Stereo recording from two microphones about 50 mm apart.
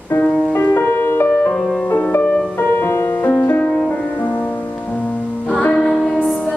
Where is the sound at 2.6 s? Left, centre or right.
Left.